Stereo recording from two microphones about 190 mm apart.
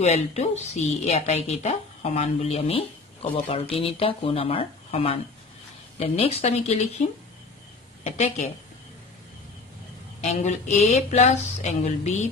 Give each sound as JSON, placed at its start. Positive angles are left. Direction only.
{"t": 0.0, "sound": "a woman's voice", "side_deg": 35}
{"t": 8.0, "sound": "a woman's voice", "side_deg": 35}
{"t": 10.2, "sound": "a woman's voice", "side_deg": 40}